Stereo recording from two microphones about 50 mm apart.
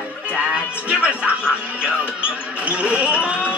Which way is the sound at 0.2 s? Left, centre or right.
Right.